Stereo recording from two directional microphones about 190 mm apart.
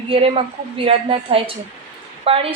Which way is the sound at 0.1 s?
30° right (ahead or behind).